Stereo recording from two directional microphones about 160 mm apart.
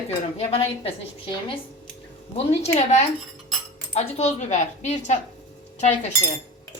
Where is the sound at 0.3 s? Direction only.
35° left (ahead or behind).